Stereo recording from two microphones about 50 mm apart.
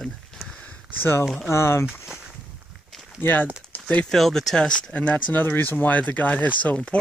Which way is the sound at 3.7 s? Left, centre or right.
Left.